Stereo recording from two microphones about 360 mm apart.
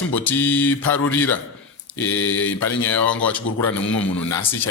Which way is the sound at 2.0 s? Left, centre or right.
Left.